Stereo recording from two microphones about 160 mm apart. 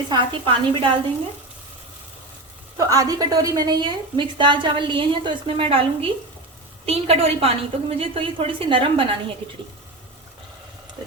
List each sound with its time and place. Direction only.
0.1 s a woman's voice: 35° right (ahead or behind)
2.7 s a woman's voice: 20° right (ahead or behind)